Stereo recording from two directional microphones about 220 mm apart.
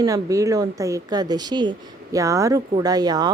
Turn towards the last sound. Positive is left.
turn(degrees=-20)  # may be behind; listen again after turning